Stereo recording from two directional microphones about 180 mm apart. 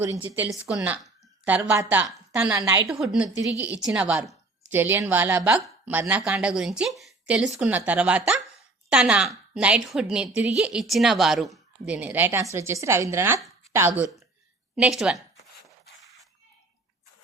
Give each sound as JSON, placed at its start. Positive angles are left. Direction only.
{"t": 0.0, "sound": "a woman's voice", "side_deg": -15}